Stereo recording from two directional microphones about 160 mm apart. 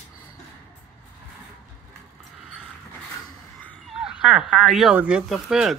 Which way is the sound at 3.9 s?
5° right (ahead or behind).